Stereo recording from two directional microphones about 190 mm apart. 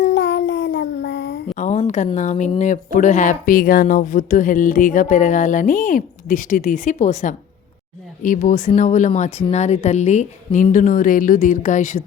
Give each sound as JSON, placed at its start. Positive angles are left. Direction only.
{"t": 0.0, "sound": "child singing", "side_deg": 65}
{"t": 1.5, "sound": "a sound", "side_deg": 40}
{"t": 1.9, "sound": "a woman's voice", "side_deg": 40}